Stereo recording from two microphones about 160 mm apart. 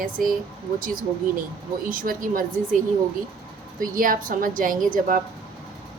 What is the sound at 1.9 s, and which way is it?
Speech, 60° right (ahead or behind).